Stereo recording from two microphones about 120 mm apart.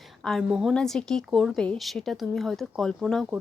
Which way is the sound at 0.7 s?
5° left (ahead or behind).